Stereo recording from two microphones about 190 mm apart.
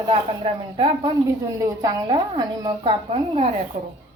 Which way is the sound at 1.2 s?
15° right (ahead or behind).